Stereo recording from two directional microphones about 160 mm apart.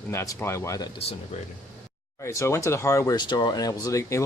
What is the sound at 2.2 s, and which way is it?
Speech, 20° left (ahead or behind).